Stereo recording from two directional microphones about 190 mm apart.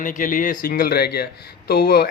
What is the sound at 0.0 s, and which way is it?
Speech, 45° left (ahead or behind).